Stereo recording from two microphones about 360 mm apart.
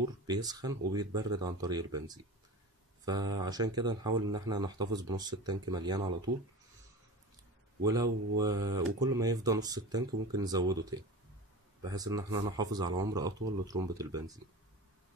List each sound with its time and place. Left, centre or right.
0.0 s speech: centre
6.3 s speech: right
7.8 s speech: centre